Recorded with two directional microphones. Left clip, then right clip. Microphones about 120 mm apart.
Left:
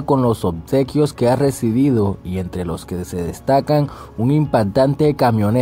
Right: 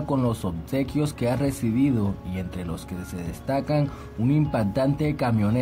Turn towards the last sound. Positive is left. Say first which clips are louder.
# left 10 dB
turn(degrees=40)  # may be behind; listen again after turning